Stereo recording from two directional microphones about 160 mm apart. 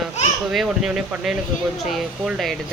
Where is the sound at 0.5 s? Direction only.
Centre (ahead or behind).